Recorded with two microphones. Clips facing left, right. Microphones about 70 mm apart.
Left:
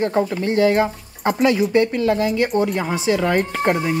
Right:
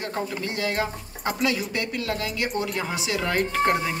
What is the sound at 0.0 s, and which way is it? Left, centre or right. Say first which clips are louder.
A woman's voice: left 10 dB; left.